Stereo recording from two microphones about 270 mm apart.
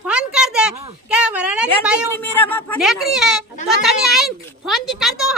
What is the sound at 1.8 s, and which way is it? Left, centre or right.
Speech, centre.